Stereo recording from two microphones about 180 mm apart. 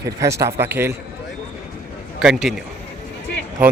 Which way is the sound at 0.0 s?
20° right (ahead or behind).